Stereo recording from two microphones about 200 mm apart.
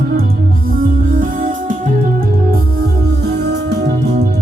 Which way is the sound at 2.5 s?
55° right (ahead or behind).